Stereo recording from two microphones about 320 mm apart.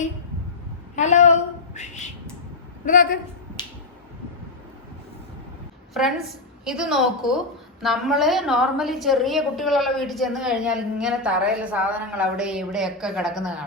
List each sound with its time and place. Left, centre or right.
0.9 s a sound: left
2.8 s a woman's voice: left
3.6 s finger snapping: centre
5.9 s a woman's voice: centre